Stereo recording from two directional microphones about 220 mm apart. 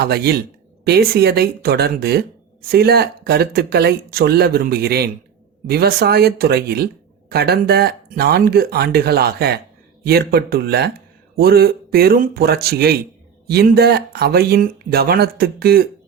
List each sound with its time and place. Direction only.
0.0 s speech: 45° right (ahead or behind)